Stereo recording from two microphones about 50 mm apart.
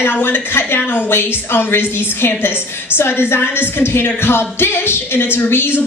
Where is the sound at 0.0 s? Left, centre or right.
Left.